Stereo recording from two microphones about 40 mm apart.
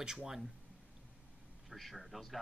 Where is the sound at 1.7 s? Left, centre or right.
Centre.